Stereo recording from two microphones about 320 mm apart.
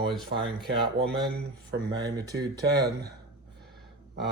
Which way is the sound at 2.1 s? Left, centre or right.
Centre.